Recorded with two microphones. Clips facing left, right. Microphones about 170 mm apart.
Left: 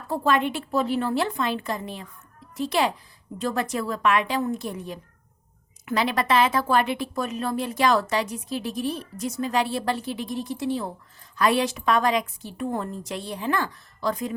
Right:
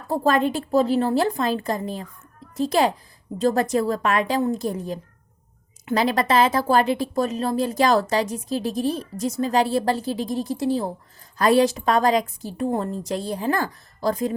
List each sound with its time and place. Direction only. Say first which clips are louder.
0.1 s speech: right 3 dB; 40° right (ahead or behind)